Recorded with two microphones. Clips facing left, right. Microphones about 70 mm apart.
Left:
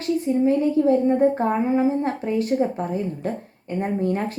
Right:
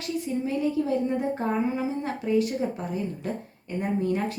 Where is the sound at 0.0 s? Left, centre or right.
Left.